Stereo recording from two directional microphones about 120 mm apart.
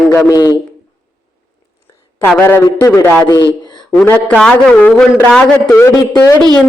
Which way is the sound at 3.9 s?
10° left (ahead or behind).